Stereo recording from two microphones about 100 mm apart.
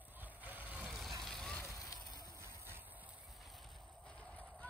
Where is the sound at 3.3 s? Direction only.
Centre (ahead or behind).